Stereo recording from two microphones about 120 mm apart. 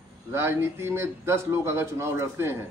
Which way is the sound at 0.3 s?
20° right (ahead or behind).